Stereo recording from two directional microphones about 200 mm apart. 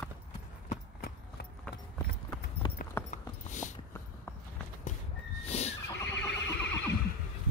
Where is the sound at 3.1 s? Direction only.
40° left (ahead or behind).